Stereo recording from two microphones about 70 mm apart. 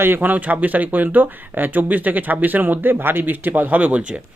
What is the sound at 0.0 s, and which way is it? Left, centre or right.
Speech, right.